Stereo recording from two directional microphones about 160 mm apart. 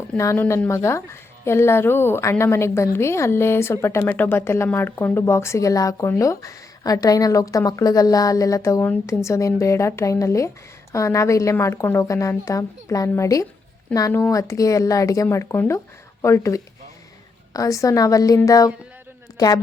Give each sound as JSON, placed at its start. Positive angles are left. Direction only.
{"t": 0.2, "sound": "a woman's voice", "side_deg": 15}